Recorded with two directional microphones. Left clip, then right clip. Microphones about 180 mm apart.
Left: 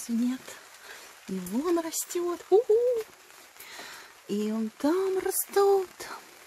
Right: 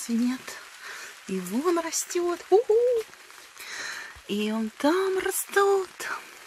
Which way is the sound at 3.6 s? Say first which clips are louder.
Right 9 dB; centre (ahead or behind).